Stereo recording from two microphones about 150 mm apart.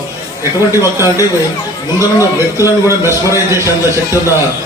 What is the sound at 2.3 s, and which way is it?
A man's voice, 15° right (ahead or behind).